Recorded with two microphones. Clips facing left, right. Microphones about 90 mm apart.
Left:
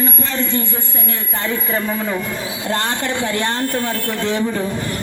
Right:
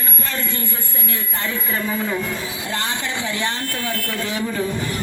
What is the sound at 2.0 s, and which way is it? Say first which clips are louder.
Speech: left 1 dB; 15° left (ahead or behind).